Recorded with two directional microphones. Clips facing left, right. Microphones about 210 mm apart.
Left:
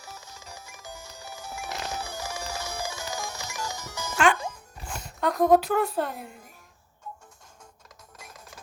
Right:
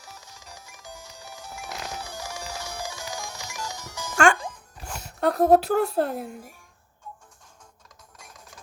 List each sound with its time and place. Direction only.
0.0 s music: 5° left (ahead or behind)
5.2 s a woman's voice: 35° right (ahead or behind)